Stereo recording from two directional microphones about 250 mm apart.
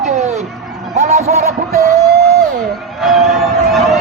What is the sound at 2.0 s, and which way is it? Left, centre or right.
Music, right.